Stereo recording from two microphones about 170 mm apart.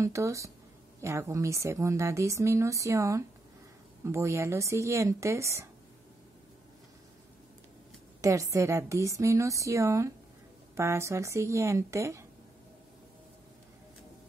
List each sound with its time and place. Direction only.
0.0 s a woman's voice: 15° right (ahead or behind)
8.2 s a woman's voice: 20° right (ahead or behind)